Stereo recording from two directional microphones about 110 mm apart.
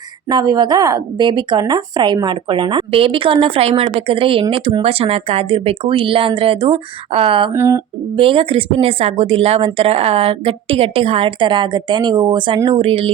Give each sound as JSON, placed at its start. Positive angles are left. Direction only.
{"t": 0.3, "sound": "a woman's voice", "side_deg": -40}
{"t": 7.5, "sound": "a sound", "side_deg": -25}
{"t": 8.1, "sound": "a woman's voice", "side_deg": -55}